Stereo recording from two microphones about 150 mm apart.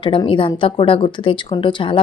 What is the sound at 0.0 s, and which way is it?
Speech, 35° left (ahead or behind).